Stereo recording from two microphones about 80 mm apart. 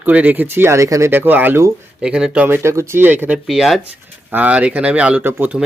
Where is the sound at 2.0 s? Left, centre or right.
Centre.